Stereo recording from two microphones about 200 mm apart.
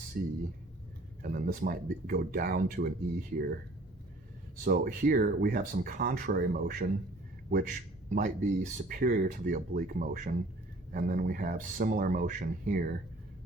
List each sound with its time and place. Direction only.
1.2 s speech: 45° right (ahead or behind)
4.6 s speech: 45° right (ahead or behind)